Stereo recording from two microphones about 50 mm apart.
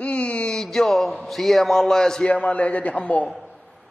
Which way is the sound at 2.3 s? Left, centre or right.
Left.